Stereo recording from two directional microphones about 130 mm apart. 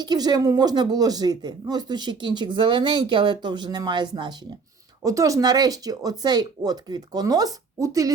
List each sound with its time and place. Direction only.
0.0 s speech: 35° right (ahead or behind)